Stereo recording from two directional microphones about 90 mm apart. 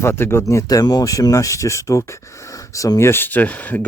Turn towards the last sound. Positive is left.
turn(degrees=20)  # may be behind; listen again after turning